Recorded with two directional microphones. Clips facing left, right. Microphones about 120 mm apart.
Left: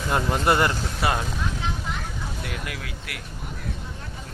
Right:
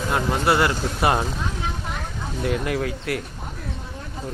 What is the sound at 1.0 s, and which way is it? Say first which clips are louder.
Speech: right 4 dB; 25° right (ahead or behind).